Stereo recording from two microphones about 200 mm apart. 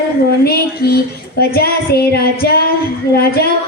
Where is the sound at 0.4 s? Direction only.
50° left (ahead or behind).